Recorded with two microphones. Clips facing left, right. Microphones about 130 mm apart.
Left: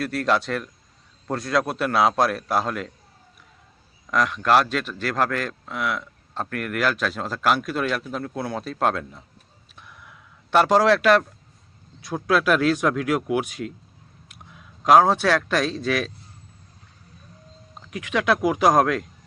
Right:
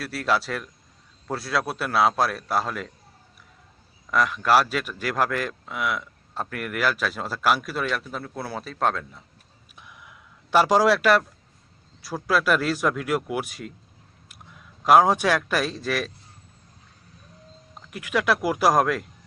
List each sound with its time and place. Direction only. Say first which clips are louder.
0.0 s a man's voice: left 3 dB; 5° right (ahead or behind)
4.1 s a man's voice: left 1 dB; 5° right (ahead or behind)
9.7 s a sound: left 1 dB; 10° right (ahead or behind)
12.0 s a man's voice: left 2 dB; centre (ahead or behind)
14.8 s speech: left 1 dB; 10° right (ahead or behind)
17.9 s a man's voice: left 2 dB; 5° right (ahead or behind)